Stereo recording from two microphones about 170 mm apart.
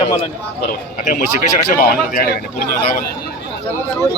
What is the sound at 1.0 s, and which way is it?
Speech, 45° left (ahead or behind).